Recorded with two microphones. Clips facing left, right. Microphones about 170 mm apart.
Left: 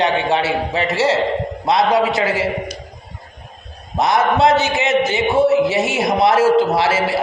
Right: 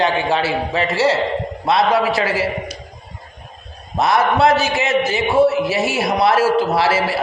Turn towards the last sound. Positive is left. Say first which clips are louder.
# even
turn(degrees=20)  # may be behind; listen again after turning